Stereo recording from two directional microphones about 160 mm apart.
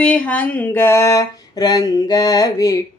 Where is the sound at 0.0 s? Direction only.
10° left (ahead or behind).